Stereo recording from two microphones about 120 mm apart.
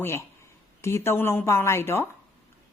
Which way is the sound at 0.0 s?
20° left (ahead or behind).